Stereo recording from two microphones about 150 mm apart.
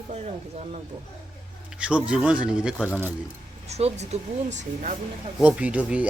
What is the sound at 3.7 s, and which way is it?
Speech, 45° right (ahead or behind).